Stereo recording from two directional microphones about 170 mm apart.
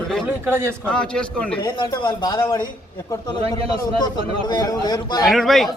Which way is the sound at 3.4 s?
35° right (ahead or behind).